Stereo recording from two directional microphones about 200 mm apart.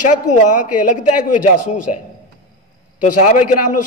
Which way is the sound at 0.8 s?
40° left (ahead or behind).